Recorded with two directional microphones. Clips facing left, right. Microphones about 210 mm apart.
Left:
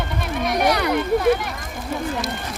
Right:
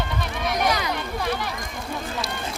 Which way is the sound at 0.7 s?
60° left (ahead or behind).